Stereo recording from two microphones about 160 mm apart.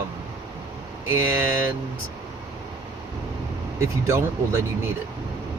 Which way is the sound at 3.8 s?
20° right (ahead or behind).